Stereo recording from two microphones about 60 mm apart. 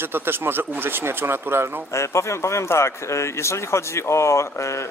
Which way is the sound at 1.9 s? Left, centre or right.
Left.